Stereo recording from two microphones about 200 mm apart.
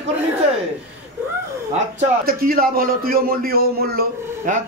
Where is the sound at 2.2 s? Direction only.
45° right (ahead or behind).